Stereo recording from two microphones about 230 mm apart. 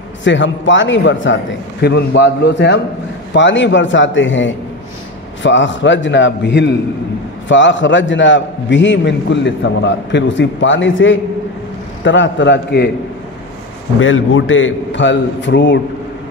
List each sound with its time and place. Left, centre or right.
0.2 s a man's voice: left
13.9 s a man's voice: left